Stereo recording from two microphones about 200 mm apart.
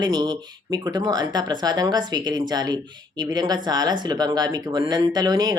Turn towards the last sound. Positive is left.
turn(degrees=-20)  # may be behind; listen again after turning